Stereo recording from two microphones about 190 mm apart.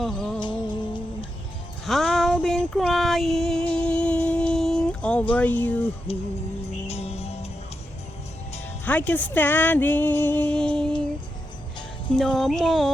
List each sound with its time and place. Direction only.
0.0 s music: centre (ahead or behind)
0.3 s music: 25° left (ahead or behind)
1.8 s a sound: centre (ahead or behind)
2.7 s child singing: centre (ahead or behind)
3.8 s music: 5° left (ahead or behind)
5.4 s speech: 10° left (ahead or behind)
6.8 s music: 35° left (ahead or behind)
8.8 s speech: 10° left (ahead or behind)
12.1 s child singing: centre (ahead or behind)